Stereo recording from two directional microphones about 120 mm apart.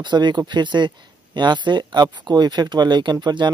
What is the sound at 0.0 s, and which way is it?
Speech, 40° right (ahead or behind).